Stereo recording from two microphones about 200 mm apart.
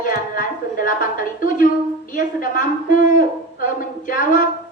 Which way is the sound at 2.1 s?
40° left (ahead or behind).